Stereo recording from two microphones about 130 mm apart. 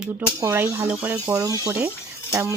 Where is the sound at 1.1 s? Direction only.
30° right (ahead or behind).